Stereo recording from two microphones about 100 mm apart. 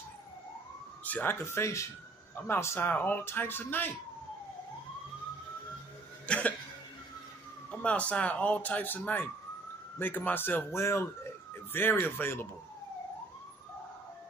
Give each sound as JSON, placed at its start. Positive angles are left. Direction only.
{"t": 1.0, "sound": "speech", "side_deg": 20}
{"t": 6.2, "sound": "cough", "side_deg": 10}
{"t": 7.7, "sound": "speech", "side_deg": 15}